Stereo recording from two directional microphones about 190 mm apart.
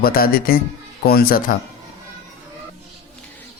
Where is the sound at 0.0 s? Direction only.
50° left (ahead or behind).